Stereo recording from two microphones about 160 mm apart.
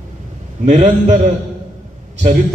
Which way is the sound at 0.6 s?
50° right (ahead or behind).